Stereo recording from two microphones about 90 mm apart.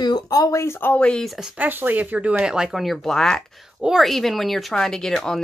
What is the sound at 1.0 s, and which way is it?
Speech, 10° left (ahead or behind).